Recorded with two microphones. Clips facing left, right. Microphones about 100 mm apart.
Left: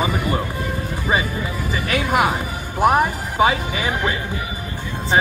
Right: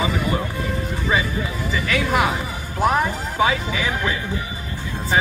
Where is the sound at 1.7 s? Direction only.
50° left (ahead or behind).